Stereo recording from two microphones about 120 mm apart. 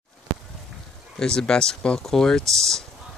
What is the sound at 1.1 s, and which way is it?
Speech, 5° left (ahead or behind).